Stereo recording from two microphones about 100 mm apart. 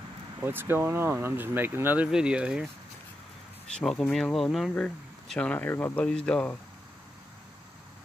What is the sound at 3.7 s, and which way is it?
Speech, 5° left (ahead or behind).